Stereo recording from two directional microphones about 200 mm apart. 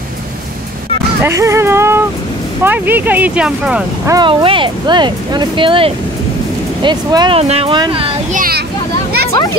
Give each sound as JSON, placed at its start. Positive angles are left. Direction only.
{"t": 1.2, "sound": "speech", "side_deg": -15}
{"t": 4.1, "sound": "speech", "side_deg": -25}
{"t": 8.4, "sound": "speech", "side_deg": -50}